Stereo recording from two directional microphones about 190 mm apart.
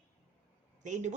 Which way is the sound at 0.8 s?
40° right (ahead or behind).